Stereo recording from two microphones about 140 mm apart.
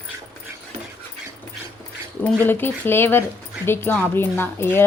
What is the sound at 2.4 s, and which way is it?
Speech, 15° left (ahead or behind).